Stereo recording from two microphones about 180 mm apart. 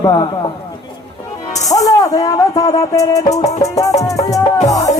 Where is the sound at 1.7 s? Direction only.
20° left (ahead or behind).